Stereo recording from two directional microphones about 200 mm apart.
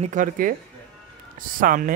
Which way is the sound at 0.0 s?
40° right (ahead or behind).